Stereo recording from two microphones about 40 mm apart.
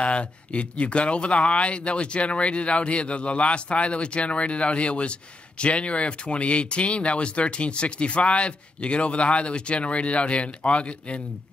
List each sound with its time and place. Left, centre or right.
0.0 s speech: left